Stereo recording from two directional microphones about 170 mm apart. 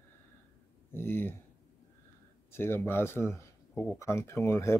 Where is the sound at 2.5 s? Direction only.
15° left (ahead or behind).